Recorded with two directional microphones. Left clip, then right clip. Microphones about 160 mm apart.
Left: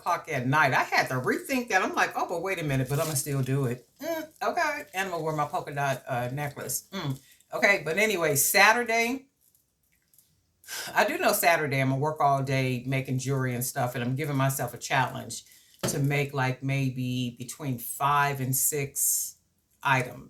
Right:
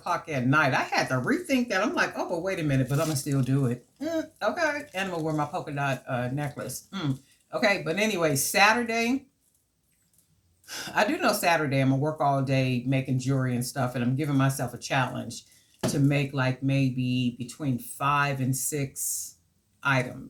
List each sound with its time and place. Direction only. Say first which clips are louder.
0.0 s speech: even; 15° left (ahead or behind)
7.6 s speech: left 2 dB; 20° left (ahead or behind)
10.7 s speech: even; 15° left (ahead or behind)